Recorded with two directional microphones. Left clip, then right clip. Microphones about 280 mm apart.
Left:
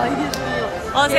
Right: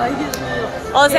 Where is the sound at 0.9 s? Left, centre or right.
Centre.